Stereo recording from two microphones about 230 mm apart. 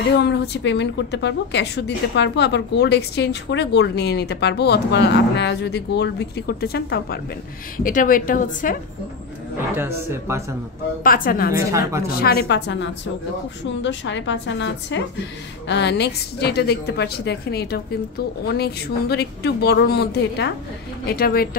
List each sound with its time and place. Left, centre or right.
0.2 s a woman's voice: left
9.8 s speech: centre
11.1 s a woman's voice: left